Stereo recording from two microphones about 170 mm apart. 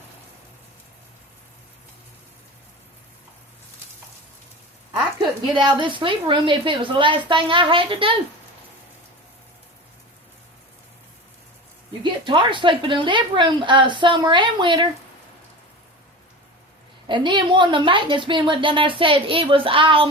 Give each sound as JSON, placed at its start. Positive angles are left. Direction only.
{"t": 5.5, "sound": "a woman's voice", "side_deg": -30}
{"t": 12.0, "sound": "a woman's voice", "side_deg": -30}
{"t": 17.1, "sound": "a woman's voice", "side_deg": -30}